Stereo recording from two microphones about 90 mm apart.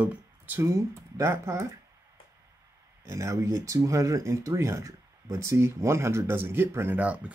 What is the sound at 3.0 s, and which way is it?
Speech, 35° right (ahead or behind).